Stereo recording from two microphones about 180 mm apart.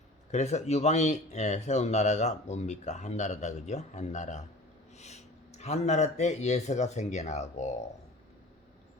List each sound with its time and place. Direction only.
0.3 s speech: 40° left (ahead or behind)